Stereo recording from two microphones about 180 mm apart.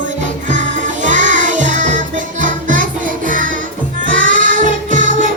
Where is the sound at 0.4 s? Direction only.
45° right (ahead or behind).